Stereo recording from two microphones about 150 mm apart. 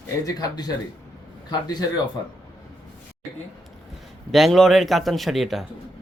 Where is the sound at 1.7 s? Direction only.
25° left (ahead or behind).